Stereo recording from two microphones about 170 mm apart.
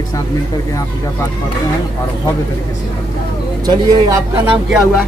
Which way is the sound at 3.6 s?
25° right (ahead or behind).